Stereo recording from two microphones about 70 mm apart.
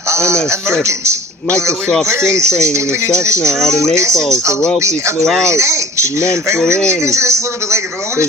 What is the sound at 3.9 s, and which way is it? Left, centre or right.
Speech, right.